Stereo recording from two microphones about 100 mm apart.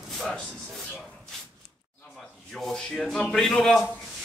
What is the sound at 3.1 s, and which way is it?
Speech, 5° left (ahead or behind).